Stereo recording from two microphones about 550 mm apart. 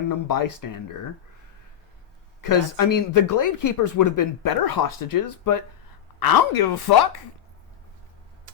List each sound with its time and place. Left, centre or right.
0.3 s speech: left
2.4 s speech: left